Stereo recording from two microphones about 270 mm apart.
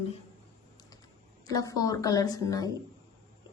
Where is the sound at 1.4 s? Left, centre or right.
Centre.